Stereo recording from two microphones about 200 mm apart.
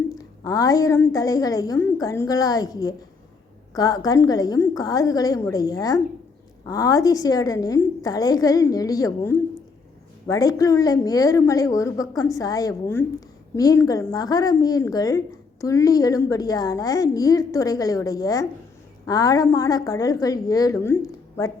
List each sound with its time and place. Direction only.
0.2 s a woman's voice: 15° left (ahead or behind)